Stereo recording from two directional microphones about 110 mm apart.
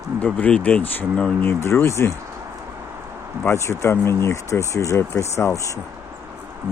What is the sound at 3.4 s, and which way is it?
Speech, 25° left (ahead or behind).